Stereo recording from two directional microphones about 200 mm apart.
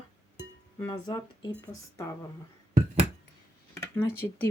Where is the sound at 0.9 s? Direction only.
20° left (ahead or behind).